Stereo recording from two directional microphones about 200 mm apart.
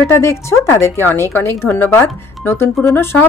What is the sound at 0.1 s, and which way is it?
Speech, 15° left (ahead or behind).